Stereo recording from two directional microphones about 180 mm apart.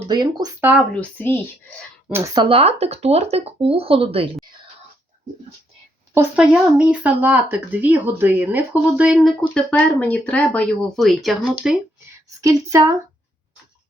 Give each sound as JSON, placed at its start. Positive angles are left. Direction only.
{"t": 0.1, "sound": "speech", "side_deg": -25}
{"t": 0.9, "sound": "speech", "side_deg": 10}
{"t": 2.0, "sound": "speech", "side_deg": -10}
{"t": 2.3, "sound": "speech", "side_deg": -30}
{"t": 6.1, "sound": "speech", "side_deg": -5}
{"t": 12.4, "sound": "speech", "side_deg": -20}